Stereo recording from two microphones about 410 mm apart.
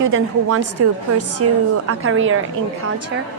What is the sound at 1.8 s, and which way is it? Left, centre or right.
Speech, right.